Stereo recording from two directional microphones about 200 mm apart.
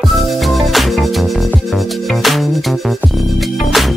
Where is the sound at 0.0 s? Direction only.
Centre (ahead or behind).